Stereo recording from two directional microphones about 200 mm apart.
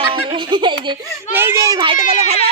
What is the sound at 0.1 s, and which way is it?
Giggle, 25° right (ahead or behind).